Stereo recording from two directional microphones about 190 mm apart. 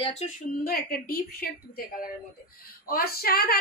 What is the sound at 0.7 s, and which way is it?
A woman's voice, 50° left (ahead or behind).